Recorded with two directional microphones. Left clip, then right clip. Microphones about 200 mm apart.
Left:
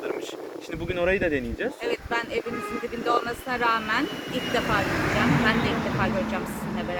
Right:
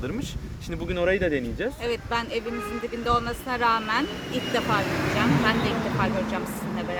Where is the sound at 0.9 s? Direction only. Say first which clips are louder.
Even; 10° right (ahead or behind).